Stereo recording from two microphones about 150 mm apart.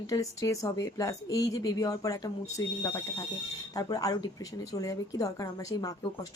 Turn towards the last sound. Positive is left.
turn(degrees=25)  # may be behind; listen again after turning